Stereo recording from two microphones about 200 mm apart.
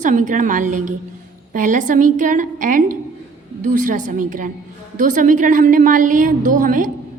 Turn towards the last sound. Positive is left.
turn(degrees=-40)  # may be behind; listen again after turning